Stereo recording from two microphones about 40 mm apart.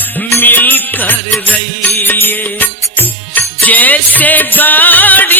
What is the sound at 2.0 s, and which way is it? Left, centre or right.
Music, left.